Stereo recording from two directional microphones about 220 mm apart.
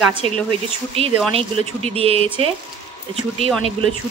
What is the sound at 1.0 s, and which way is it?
A woman's voice, 25° right (ahead or behind).